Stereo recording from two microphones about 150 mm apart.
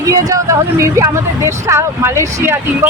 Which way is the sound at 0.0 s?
20° right (ahead or behind).